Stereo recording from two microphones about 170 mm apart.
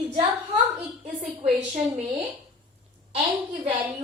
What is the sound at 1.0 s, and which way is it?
Speech, 40° right (ahead or behind).